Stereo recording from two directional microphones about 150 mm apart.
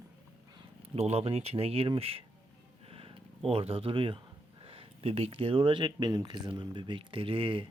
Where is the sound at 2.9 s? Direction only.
40° right (ahead or behind).